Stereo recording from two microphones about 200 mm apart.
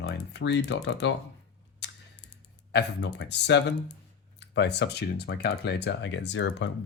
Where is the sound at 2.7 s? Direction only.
60° left (ahead or behind).